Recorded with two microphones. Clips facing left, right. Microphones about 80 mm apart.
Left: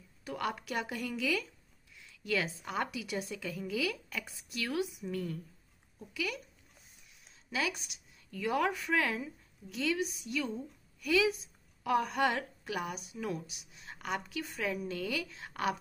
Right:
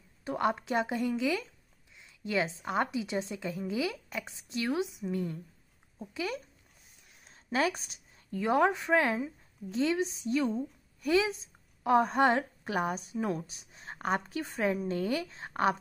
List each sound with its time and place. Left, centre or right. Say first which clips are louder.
0.2 s a woman's voice: right 6 dB; right
7.1 s a woman's voice: right 8 dB; right